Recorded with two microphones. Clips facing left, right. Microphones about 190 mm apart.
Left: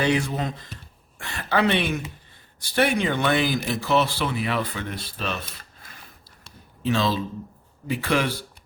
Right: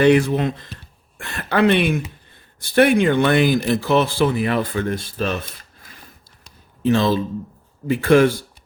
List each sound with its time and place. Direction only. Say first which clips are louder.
0.0 s speech: right 9 dB; 60° right (ahead or behind)
6.8 s speech: right 6 dB; 50° right (ahead or behind)